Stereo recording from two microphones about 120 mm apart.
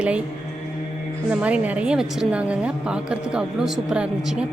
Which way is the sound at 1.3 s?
10° right (ahead or behind).